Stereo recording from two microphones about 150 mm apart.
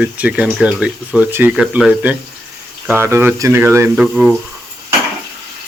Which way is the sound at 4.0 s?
5° right (ahead or behind).